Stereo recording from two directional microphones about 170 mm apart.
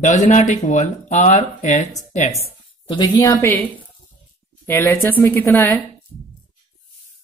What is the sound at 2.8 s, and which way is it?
Speech, 25° left (ahead or behind).